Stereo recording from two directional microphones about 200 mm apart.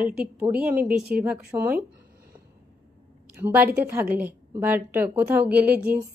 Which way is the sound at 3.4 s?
10° right (ahead or behind).